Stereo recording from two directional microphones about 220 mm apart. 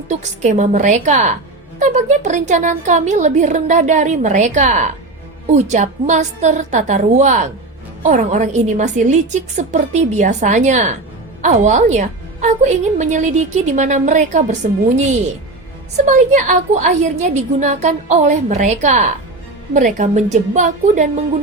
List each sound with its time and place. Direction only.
0.1 s speech: 30° right (ahead or behind)
16.0 s speech: 35° right (ahead or behind)